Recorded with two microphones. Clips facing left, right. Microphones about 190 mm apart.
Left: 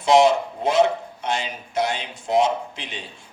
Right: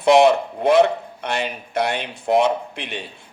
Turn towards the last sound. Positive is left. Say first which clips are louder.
# right 3 dB
turn(degrees=-60)  # may be behind; listen again after turning